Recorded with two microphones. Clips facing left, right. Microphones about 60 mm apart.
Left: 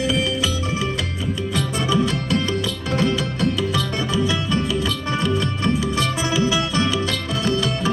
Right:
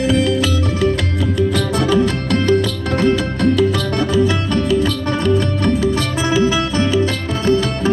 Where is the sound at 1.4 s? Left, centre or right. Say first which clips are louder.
Right 8 dB; right.